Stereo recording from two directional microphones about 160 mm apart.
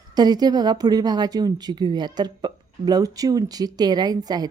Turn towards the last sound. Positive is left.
turn(degrees=-25)  # may be behind; listen again after turning